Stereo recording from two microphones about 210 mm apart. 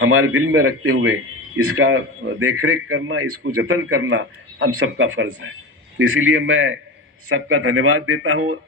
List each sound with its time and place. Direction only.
0.0 s a man's voice: 85° right; by 6.7 s 70° right (ahead or behind)
7.3 s a man's voice: 90° right